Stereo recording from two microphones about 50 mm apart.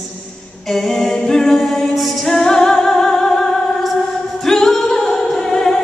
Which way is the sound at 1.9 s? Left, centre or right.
Centre.